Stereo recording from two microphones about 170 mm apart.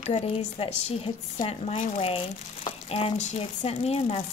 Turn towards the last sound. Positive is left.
turn(degrees=35)  # may be behind; listen again after turning